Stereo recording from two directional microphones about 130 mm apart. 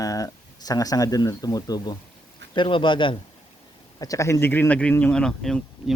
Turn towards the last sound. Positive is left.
turn(degrees=5)  # may be behind; listen again after turning